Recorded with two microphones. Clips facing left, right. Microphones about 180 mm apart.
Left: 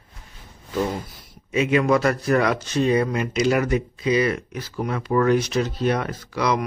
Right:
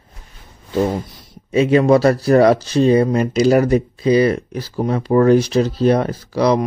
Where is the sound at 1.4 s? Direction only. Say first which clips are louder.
Right 6 dB; 35° right (ahead or behind).